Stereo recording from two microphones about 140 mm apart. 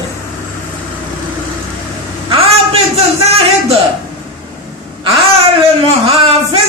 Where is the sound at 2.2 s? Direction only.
45° right (ahead or behind).